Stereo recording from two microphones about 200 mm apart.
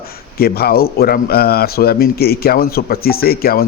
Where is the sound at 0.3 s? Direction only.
50° left (ahead or behind).